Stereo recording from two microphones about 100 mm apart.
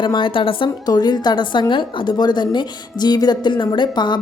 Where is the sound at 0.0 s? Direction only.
50° left (ahead or behind).